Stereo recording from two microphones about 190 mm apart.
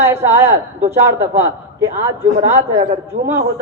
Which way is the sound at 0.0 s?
15° right (ahead or behind).